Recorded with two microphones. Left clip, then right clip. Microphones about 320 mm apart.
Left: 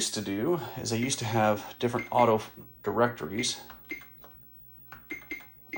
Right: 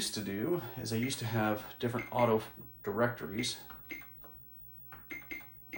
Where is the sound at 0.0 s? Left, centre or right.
Left.